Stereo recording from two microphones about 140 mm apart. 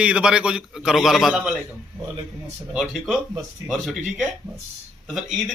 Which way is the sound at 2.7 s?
5° right (ahead or behind).